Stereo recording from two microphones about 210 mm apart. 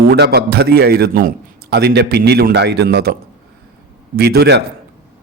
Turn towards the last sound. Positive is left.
turn(degrees=-50)  # may be behind; listen again after turning